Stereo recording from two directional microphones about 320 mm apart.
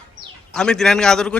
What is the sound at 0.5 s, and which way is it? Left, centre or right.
Speech, centre.